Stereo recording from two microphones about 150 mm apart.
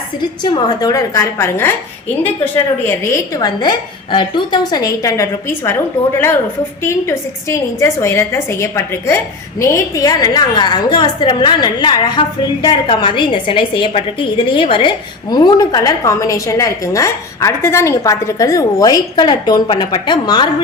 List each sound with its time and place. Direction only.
0.2 s a woman's voice: 30° left (ahead or behind)
6.8 s a woman's voice: 20° left (ahead or behind)